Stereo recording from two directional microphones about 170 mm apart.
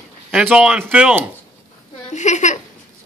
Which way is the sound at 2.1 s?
45° left (ahead or behind).